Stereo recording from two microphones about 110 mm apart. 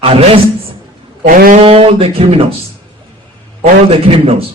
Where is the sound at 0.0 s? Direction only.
60° right (ahead or behind).